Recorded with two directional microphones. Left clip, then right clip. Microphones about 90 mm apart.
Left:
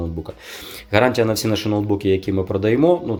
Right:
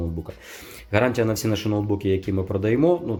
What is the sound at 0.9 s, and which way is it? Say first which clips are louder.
Speech: left 5 dB; 20° left (ahead or behind).